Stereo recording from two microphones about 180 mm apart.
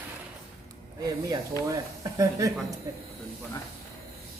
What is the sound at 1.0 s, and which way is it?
Speech, 20° right (ahead or behind).